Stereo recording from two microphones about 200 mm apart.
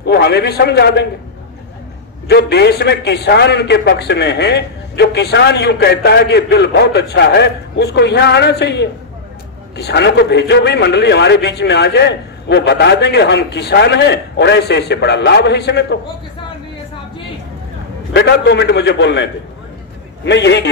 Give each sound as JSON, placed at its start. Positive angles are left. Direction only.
{"t": 0.0, "sound": "a man's voice", "side_deg": 55}
{"t": 2.2, "sound": "a man's voice", "side_deg": 55}
{"t": 18.1, "sound": "a man's voice", "side_deg": 55}
{"t": 20.2, "sound": "a man's voice", "side_deg": 60}